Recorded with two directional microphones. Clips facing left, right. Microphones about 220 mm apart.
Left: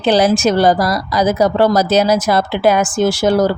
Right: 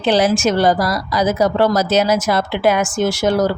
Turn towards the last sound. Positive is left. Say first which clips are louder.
# left 3 dB
turn(degrees=30)  # may be behind; listen again after turning